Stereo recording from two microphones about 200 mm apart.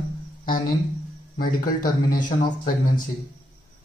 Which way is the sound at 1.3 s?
45° left (ahead or behind).